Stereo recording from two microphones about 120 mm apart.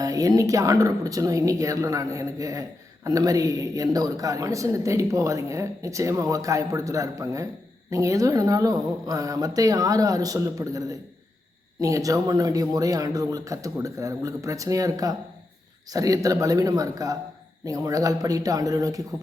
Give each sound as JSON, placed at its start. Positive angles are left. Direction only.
{"t": 0.0, "sound": "speech", "side_deg": -30}